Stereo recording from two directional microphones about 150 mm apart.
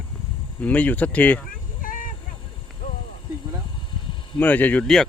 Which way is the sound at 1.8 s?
65° left (ahead or behind).